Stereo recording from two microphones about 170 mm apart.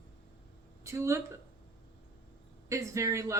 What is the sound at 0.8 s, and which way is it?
Speech, 15° right (ahead or behind).